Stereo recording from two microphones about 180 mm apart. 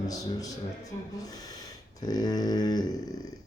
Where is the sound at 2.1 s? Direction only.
20° left (ahead or behind).